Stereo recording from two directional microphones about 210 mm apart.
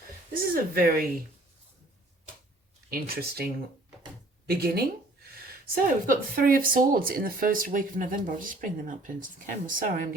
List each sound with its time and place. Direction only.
0.4 s speech: 45° right (ahead or behind)
2.9 s speech: 45° right (ahead or behind)